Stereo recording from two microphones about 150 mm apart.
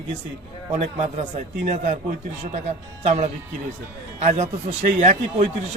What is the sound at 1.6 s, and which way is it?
Speech, 60° right (ahead or behind).